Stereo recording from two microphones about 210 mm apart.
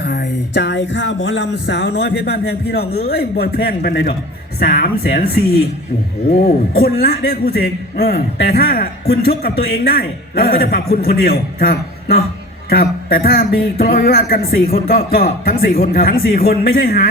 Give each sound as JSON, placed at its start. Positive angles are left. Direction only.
{"t": 0.0, "sound": "a man's voice", "side_deg": 55}
{"t": 6.4, "sound": "a man's voice", "side_deg": 45}